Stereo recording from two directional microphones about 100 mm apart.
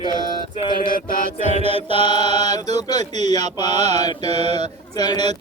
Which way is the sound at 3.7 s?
90° right.